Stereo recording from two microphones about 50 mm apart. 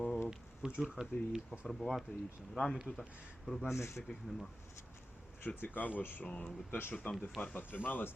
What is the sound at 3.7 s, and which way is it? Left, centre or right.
Speech, left.